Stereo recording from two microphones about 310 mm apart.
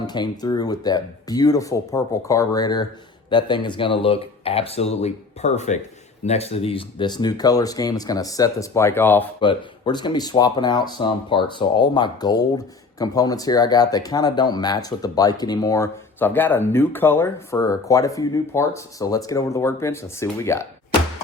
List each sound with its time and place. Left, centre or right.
0.1 s speech: centre